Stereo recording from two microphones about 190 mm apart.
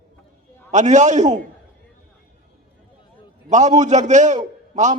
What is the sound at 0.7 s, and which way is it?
Speech, 40° right (ahead or behind).